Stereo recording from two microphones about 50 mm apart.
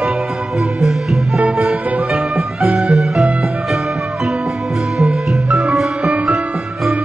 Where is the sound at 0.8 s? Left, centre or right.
Centre.